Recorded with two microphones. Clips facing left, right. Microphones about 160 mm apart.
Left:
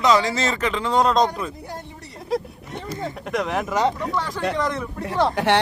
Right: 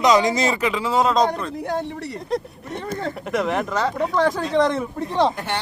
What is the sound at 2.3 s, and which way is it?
Speech, centre (ahead or behind).